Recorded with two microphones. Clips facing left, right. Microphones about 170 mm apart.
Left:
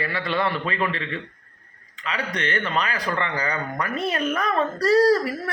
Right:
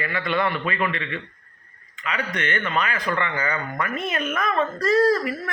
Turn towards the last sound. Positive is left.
turn(degrees=40)  # may be behind; listen again after turning